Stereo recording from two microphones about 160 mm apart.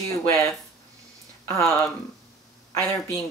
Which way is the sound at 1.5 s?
10° left (ahead or behind).